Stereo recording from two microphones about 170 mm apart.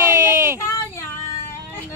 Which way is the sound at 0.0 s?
15° right (ahead or behind).